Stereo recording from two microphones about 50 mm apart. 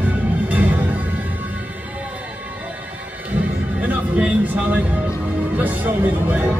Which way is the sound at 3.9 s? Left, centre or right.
Right.